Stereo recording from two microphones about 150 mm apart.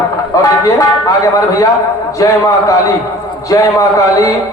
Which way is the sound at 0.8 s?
20° left (ahead or behind).